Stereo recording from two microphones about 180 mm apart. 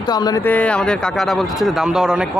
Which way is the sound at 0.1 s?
20° left (ahead or behind).